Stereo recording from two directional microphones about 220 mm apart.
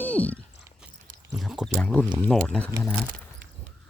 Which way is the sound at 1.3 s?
Centre (ahead or behind).